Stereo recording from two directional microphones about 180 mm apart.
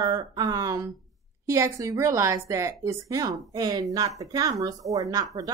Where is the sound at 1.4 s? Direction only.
15° right (ahead or behind).